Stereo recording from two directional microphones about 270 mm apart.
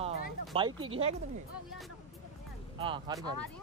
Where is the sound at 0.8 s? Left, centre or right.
Right.